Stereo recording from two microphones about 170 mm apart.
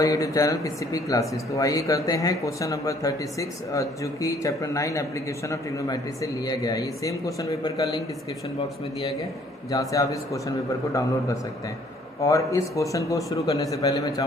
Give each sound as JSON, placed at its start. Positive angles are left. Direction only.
{"t": 0.0, "sound": "speech", "side_deg": 20}
{"t": 9.7, "sound": "speech", "side_deg": 20}